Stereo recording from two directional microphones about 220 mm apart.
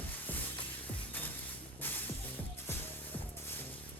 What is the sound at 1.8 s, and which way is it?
Music, 10° left (ahead or behind).